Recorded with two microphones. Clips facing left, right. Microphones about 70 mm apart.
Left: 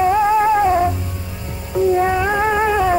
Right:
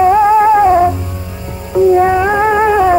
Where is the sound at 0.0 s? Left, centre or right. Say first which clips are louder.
Right 6 dB; centre.